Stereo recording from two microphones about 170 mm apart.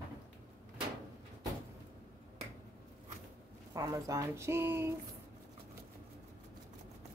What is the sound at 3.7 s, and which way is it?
Speech, 20° right (ahead or behind).